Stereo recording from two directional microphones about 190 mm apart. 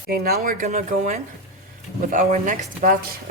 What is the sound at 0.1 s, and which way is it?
Speech, 50° right (ahead or behind).